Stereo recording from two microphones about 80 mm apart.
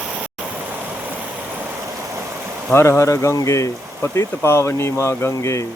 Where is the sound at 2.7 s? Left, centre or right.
Left.